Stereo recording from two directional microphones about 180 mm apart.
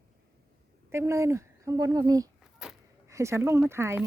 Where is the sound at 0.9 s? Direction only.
15° right (ahead or behind).